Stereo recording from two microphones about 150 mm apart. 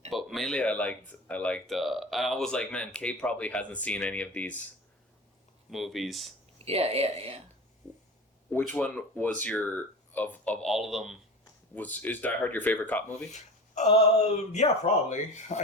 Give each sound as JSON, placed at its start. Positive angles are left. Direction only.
{"t": 0.1, "sound": "speech", "side_deg": 0}
{"t": 5.7, "sound": "speech", "side_deg": 0}
{"t": 6.7, "sound": "speech", "side_deg": -40}
{"t": 8.7, "sound": "speech", "side_deg": 5}
{"t": 11.7, "sound": "speech", "side_deg": 10}
{"t": 13.3, "sound": "speech", "side_deg": 50}